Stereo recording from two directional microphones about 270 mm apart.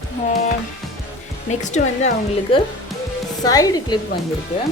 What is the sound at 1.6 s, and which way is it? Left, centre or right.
Speech, left.